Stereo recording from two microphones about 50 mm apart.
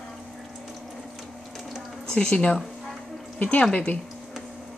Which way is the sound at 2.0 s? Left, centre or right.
Centre.